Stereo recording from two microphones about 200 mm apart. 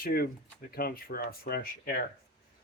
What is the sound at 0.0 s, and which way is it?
Speech, 50° left (ahead or behind).